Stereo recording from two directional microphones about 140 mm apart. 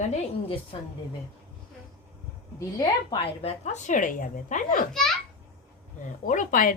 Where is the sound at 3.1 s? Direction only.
50° left (ahead or behind); by 4.9 s 70° left (ahead or behind).